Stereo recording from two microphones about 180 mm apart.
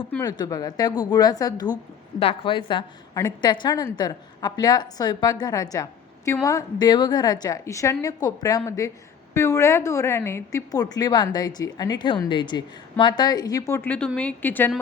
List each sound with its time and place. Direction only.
0.2 s a woman's voice: 20° left (ahead or behind)